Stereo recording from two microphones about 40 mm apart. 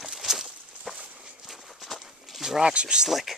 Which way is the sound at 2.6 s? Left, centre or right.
Right.